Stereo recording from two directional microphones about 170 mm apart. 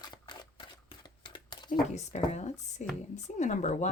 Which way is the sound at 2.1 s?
45° left (ahead or behind).